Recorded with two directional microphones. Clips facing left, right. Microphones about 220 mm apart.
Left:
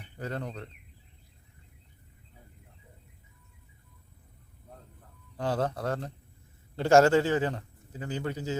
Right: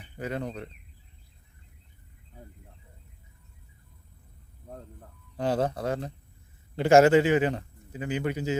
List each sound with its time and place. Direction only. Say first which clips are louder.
0.2 s speech: right 3 dB; 15° right (ahead or behind)
5.4 s a man's voice: right 3 dB; 15° right (ahead or behind)